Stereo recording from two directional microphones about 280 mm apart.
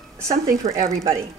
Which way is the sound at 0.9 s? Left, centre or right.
Centre.